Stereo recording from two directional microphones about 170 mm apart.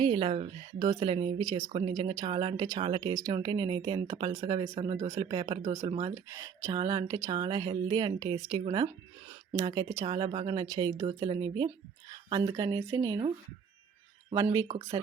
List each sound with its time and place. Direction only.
0.0 s speech: 25° right (ahead or behind)
14.3 s speech: 15° right (ahead or behind)